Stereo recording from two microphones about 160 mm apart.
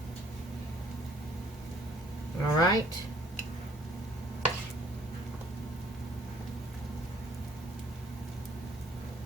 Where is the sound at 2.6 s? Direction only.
25° left (ahead or behind).